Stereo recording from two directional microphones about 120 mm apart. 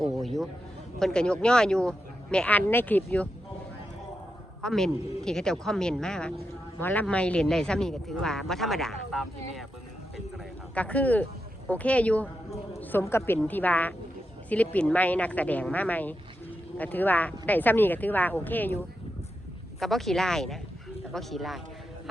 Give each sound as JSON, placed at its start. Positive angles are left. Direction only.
{"t": 0.0, "sound": "speech", "side_deg": 0}
{"t": 4.6, "sound": "speech", "side_deg": 5}
{"t": 10.3, "sound": "speech", "side_deg": 10}
{"t": 19.8, "sound": "speech", "side_deg": 0}